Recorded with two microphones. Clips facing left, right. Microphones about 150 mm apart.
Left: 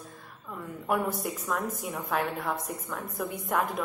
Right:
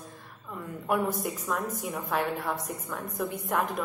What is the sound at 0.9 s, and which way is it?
A woman's voice, centre (ahead or behind).